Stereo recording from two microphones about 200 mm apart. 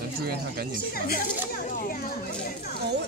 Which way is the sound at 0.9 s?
50° left (ahead or behind).